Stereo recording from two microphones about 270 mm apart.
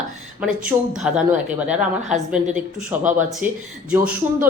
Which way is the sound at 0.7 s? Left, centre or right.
Centre.